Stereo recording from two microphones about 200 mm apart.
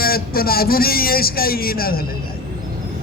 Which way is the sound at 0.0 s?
50° left (ahead or behind).